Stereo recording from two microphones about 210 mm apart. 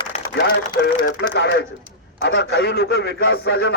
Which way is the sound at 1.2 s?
55° left (ahead or behind).